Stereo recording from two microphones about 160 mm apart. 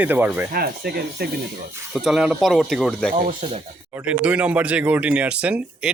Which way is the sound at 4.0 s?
5° right (ahead or behind).